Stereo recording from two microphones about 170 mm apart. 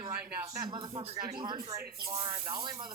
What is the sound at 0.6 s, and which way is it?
Speech, 25° right (ahead or behind).